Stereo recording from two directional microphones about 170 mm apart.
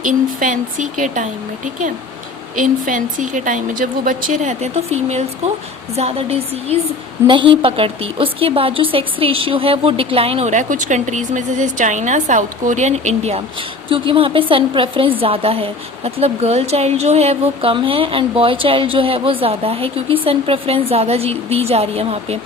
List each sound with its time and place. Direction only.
0.0 s speech: 50° right (ahead or behind)
2.6 s a woman's voice: 50° right (ahead or behind)
13.9 s a woman's voice: 30° right (ahead or behind)